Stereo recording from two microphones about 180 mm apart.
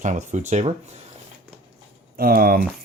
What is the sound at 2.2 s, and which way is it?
Speech, 55° right (ahead or behind).